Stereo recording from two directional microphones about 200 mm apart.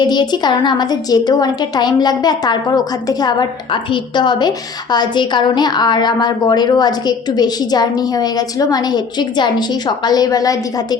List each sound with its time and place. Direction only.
0.0 s a woman's voice: 20° left (ahead or behind)